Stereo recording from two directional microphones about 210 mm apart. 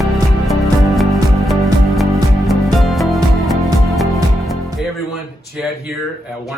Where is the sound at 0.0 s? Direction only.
Centre (ahead or behind).